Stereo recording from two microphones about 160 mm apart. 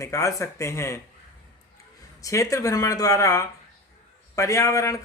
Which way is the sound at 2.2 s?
20° left (ahead or behind).